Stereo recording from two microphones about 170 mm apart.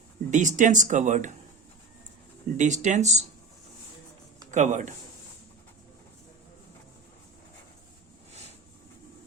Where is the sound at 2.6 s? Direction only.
45° right (ahead or behind).